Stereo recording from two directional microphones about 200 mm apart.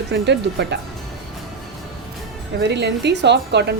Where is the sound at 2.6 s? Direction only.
55° right (ahead or behind).